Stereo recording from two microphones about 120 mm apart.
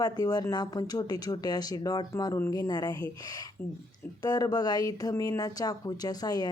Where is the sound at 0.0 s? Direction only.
35° left (ahead or behind).